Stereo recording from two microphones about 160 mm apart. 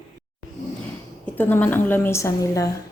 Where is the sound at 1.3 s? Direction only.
10° left (ahead or behind).